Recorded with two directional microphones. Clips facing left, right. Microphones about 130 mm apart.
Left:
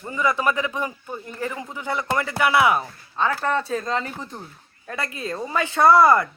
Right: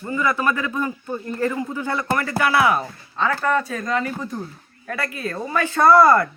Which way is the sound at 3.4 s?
30° left (ahead or behind).